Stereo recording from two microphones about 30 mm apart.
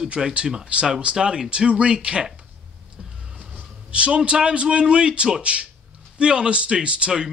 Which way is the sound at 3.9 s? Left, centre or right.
Right.